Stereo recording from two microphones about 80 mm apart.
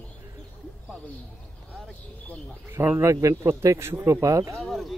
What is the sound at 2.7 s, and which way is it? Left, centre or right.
Speech, right.